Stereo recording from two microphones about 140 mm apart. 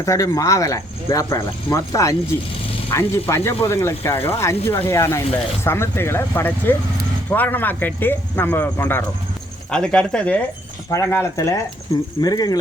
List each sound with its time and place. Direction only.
0.0 s speech: 20° left (ahead or behind)
10.9 s speech: 20° left (ahead or behind)